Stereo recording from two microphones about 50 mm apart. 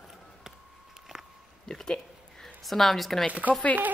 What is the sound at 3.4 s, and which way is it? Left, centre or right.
Speech, right.